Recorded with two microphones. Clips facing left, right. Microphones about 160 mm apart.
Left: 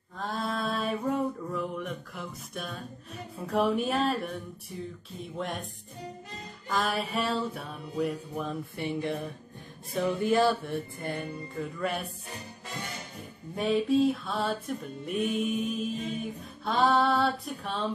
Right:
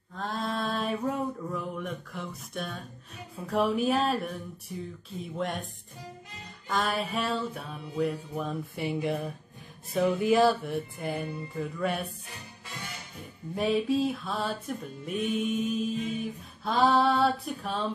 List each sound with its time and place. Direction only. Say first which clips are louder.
0.1 s a sound: even; centre (ahead or behind)
3.4 s music: right 1 dB; centre (ahead or behind)
6.7 s music: even; centre (ahead or behind)
12.3 s music: left 4 dB; 45° left (ahead or behind)
13.6 s music: left 1 dB; centre (ahead or behind)